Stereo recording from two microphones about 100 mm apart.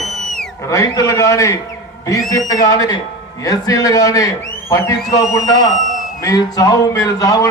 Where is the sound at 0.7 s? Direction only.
35° left (ahead or behind).